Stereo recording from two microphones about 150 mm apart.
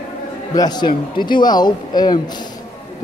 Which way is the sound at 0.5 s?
25° left (ahead or behind).